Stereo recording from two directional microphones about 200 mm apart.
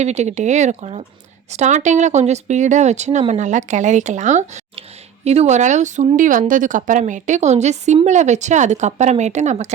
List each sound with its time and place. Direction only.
0.0 s speech: 35° right (ahead or behind)